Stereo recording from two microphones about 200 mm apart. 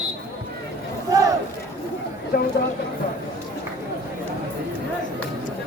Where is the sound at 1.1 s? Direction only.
15° right (ahead or behind).